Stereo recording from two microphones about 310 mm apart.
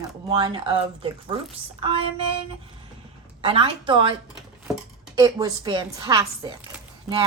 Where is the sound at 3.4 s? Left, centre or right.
Centre.